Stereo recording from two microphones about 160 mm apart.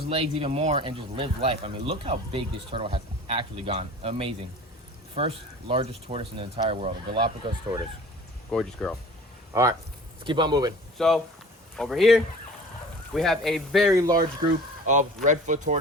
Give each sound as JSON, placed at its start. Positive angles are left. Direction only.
{"t": 0.1, "sound": "speech", "side_deg": -35}
{"t": 8.4, "sound": "speech", "side_deg": 5}
{"t": 9.5, "sound": "speech", "side_deg": -20}
{"t": 10.9, "sound": "speech", "side_deg": 0}
{"t": 14.8, "sound": "speech", "side_deg": -50}